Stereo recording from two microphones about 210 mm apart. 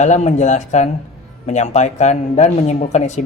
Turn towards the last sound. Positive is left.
turn(degrees=35)  # may be behind; listen again after turning